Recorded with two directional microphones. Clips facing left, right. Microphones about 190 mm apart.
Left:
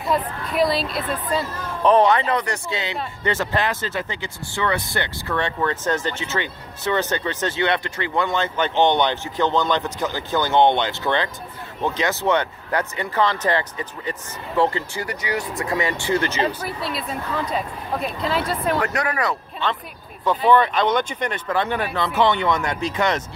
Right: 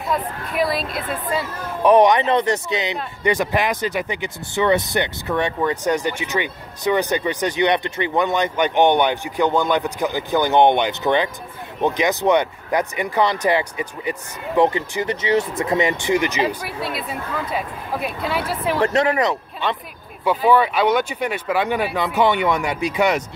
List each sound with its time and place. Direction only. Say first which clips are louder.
0.0 s speech: left 1 dB; centre (ahead or behind)
18.8 s speech: right 5 dB; 25° right (ahead or behind)
20.2 s speech: right 1 dB; 5° right (ahead or behind)